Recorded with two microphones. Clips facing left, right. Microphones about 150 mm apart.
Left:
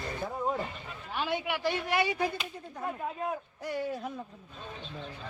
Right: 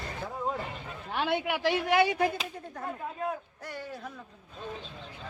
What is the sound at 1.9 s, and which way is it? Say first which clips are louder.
Speech: right 6 dB; 90° right.